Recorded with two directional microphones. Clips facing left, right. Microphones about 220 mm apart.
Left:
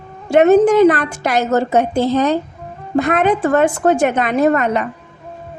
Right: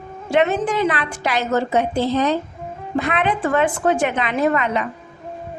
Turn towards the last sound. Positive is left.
turn(degrees=45)  # may be behind; listen again after turning